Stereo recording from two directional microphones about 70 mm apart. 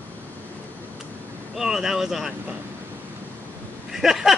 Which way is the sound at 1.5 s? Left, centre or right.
Centre.